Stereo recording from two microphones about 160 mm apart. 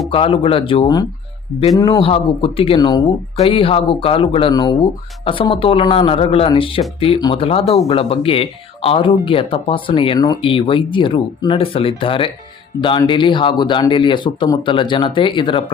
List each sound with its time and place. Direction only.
0.1 s speech: 35° left (ahead or behind)